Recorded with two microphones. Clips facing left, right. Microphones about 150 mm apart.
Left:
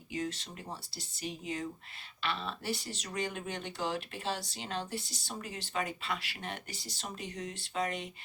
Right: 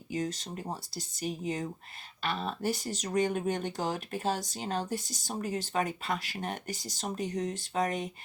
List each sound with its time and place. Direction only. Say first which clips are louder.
0.1 s speech: right 4 dB; 40° right (ahead or behind)